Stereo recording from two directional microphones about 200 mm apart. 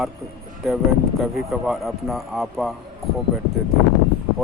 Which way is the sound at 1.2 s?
Centre (ahead or behind).